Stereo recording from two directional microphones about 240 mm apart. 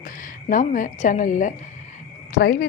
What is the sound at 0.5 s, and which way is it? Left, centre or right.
A woman's voice, left.